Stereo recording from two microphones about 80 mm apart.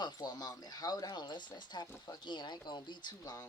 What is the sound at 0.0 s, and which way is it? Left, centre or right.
Speech, left.